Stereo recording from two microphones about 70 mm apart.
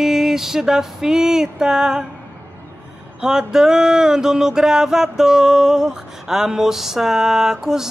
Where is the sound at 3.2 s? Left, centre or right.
Centre.